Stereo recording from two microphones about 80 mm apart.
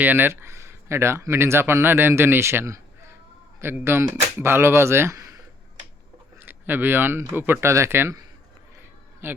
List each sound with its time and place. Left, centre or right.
0.0 s speech: right
6.4 s speech: right
9.2 s speech: right